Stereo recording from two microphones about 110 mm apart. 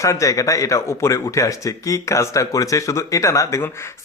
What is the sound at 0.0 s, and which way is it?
Speech, 30° left (ahead or behind).